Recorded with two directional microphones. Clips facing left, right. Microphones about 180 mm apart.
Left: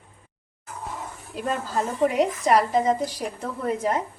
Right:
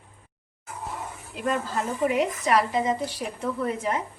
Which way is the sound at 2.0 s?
40° left (ahead or behind).